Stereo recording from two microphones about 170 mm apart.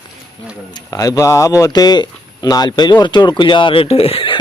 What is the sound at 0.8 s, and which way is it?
Speech, 20° left (ahead or behind).